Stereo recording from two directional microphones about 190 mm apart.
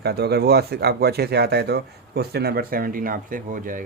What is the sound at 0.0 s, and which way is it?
Speech, 55° right (ahead or behind).